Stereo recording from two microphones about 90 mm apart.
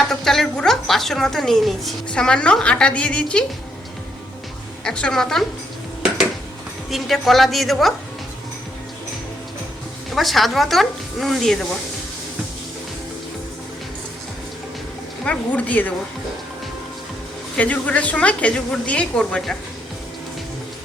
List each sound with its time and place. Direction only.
0.1 s speech: 5° left (ahead or behind)
4.8 s a woman's voice: 10° left (ahead or behind)
6.9 s speech: centre (ahead or behind)
10.1 s speech: centre (ahead or behind)
15.2 s a woman's voice: 15° left (ahead or behind)
17.6 s a woman's voice: 15° left (ahead or behind)